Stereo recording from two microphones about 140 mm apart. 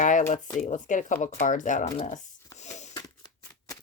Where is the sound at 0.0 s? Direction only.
65° left (ahead or behind).